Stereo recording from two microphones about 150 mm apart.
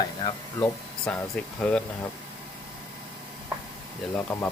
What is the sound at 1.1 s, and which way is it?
Speech, 5° left (ahead or behind).